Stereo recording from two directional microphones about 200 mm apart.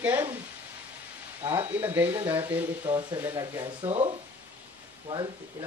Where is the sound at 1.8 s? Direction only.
10° right (ahead or behind); by 4.1 s 30° right (ahead or behind).